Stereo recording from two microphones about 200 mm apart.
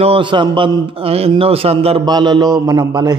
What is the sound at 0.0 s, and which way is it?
A man's voice, 25° right (ahead or behind).